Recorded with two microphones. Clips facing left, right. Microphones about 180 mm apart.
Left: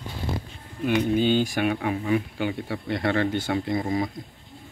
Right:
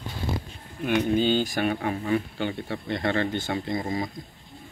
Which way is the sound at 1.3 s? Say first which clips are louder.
Left 2 dB; 10° left (ahead or behind).